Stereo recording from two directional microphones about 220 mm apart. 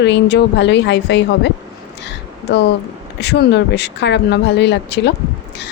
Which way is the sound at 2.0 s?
50° left (ahead or behind).